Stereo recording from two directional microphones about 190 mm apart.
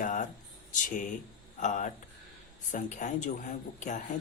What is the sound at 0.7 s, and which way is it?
Speech, 45° left (ahead or behind).